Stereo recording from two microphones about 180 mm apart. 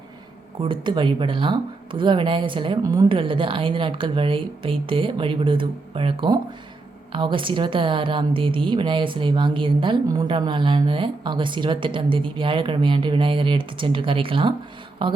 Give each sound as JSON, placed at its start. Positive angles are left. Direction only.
{"t": 0.6, "sound": "a woman's voice", "side_deg": -25}